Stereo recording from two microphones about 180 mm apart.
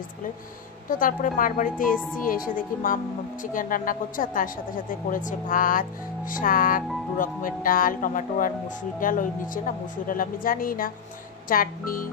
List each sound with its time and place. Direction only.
0.8 s speech: 50° left (ahead or behind)